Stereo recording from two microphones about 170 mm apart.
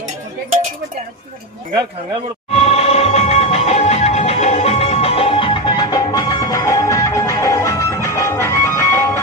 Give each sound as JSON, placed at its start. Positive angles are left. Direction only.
{"t": 2.5, "sound": "music", "side_deg": 35}